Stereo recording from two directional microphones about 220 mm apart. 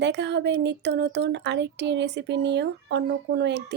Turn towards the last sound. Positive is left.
turn(degrees=-50)  # may be behind; listen again after turning